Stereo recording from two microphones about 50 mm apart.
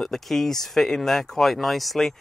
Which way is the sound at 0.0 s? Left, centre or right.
Centre.